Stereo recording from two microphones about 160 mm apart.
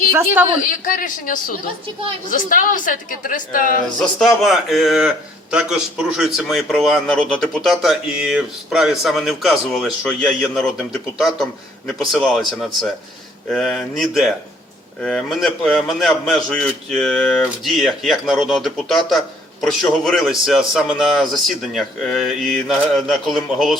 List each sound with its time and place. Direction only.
0.6 s a woman's voice: 55° left (ahead or behind)
4.2 s a man's voice: centre (ahead or behind)